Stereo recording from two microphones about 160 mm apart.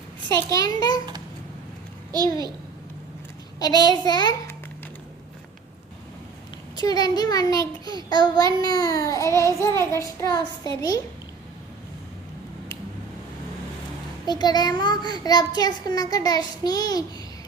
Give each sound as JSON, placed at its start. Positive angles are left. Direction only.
{"t": 0.5, "sound": "a child's voice", "side_deg": 25}
{"t": 2.1, "sound": "a child's voice", "side_deg": -25}
{"t": 3.6, "sound": "a child's voice", "side_deg": 25}
{"t": 6.7, "sound": "a child's voice", "side_deg": 25}
{"t": 14.3, "sound": "a child's voice", "side_deg": 25}